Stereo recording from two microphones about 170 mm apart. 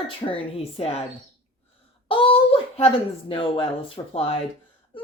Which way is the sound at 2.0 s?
30° left (ahead or behind).